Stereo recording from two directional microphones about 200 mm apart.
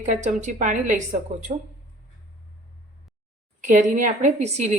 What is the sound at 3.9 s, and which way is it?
Speech, 40° right (ahead or behind).